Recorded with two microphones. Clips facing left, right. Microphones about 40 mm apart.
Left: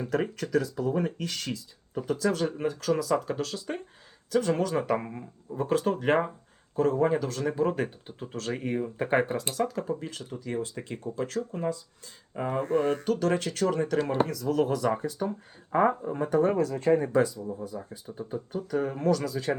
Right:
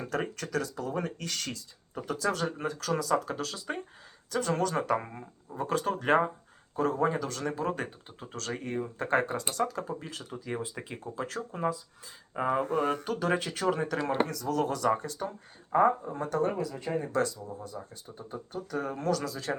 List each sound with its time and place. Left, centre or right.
0.1 s speech: centre
14.3 s speech: centre
15.7 s speech: centre
16.6 s speech: left
17.1 s speech: centre